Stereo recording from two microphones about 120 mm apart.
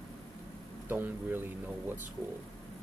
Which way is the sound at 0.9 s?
15° right (ahead or behind).